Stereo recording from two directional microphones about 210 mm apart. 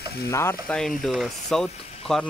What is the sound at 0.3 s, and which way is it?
Frying, 10° left (ahead or behind).